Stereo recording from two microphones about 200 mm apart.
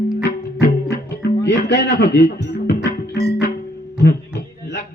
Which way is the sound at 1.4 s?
55° left (ahead or behind).